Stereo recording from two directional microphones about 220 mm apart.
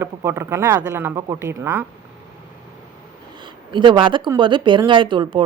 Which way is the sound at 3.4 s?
20° right (ahead or behind).